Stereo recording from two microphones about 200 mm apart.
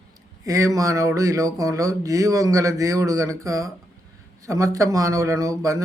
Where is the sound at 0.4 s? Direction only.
15° right (ahead or behind).